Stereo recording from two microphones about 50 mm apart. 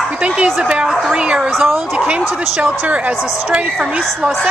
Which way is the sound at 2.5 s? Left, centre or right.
Right.